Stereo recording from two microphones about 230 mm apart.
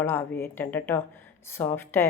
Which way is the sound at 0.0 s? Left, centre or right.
Centre.